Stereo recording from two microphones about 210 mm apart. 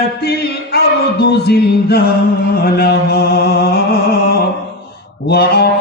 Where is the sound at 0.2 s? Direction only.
50° left (ahead or behind).